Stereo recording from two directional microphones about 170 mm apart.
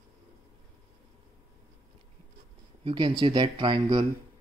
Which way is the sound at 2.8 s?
30° right (ahead or behind).